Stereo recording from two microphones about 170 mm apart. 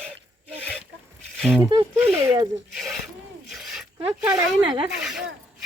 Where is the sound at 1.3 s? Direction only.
Centre (ahead or behind).